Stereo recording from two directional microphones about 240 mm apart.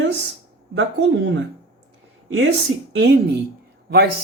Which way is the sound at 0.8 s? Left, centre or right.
Right.